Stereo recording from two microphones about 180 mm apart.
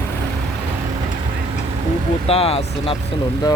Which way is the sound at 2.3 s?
35° left (ahead or behind).